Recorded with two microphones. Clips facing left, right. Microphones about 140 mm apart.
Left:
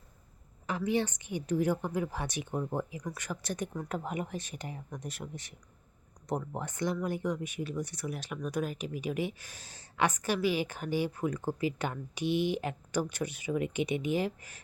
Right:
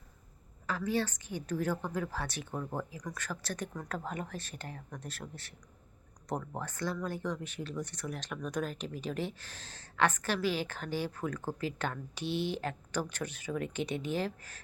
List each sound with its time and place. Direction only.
0.7 s speech: 20° left (ahead or behind)